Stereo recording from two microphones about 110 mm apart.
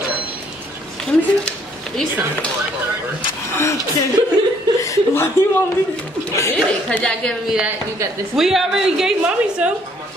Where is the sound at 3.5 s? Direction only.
25° left (ahead or behind).